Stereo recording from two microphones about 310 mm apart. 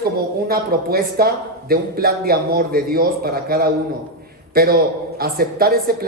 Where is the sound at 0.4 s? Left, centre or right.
Right.